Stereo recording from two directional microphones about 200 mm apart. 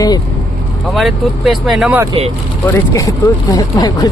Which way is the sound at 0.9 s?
Centre (ahead or behind).